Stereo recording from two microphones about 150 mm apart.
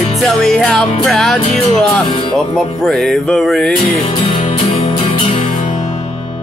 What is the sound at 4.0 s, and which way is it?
Music, 45° left (ahead or behind).